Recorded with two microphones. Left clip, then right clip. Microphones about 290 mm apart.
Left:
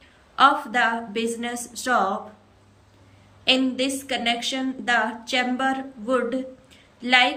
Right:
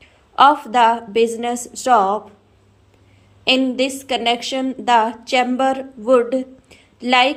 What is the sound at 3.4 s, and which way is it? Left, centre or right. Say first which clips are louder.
A woman's voice: right 4 dB; centre.